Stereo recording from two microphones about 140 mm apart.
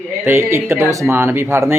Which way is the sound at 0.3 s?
15° right (ahead or behind).